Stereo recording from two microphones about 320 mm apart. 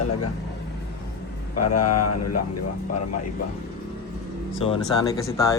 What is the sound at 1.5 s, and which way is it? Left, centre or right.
Speech, left.